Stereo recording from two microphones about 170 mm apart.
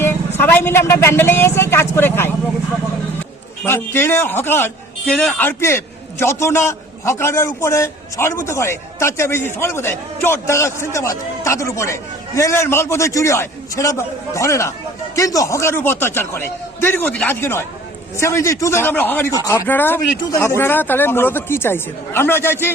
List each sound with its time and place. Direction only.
0.0 s speech: 15° left (ahead or behind)
3.6 s a man's voice: 15° left (ahead or behind)